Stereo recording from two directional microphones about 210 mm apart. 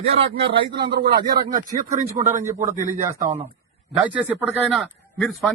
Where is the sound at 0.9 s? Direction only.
45° right (ahead or behind).